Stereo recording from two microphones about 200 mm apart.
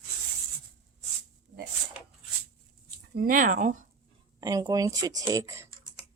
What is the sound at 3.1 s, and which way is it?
Speech, 45° right (ahead or behind).